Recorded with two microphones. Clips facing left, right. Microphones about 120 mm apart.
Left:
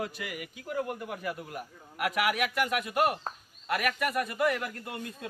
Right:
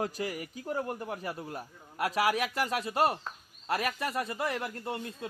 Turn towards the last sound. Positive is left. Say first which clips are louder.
# right 2 dB
turn(degrees=-30)  # may be behind; listen again after turning